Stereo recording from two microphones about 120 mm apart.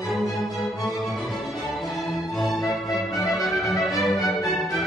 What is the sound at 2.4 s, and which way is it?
Music, centre (ahead or behind).